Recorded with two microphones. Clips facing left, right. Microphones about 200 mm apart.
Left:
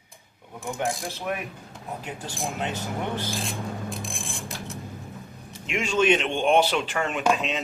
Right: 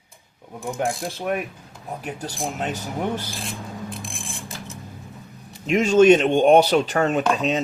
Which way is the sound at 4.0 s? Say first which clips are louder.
Even; centre (ahead or behind).